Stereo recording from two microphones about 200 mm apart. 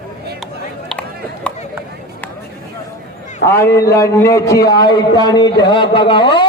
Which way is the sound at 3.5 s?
10° left (ahead or behind).